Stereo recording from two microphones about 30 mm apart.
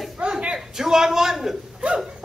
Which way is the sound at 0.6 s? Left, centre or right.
Centre.